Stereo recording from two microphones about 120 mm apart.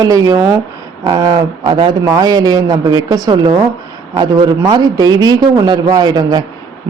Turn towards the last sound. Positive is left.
turn(degrees=-30)  # may be behind; listen again after turning